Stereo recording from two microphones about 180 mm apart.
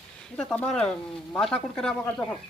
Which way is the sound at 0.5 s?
5° left (ahead or behind).